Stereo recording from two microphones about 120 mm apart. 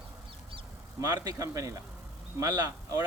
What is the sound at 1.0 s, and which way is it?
Speech, 30° right (ahead or behind).